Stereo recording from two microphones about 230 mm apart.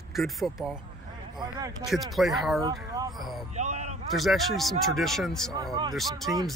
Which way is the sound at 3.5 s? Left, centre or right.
Right.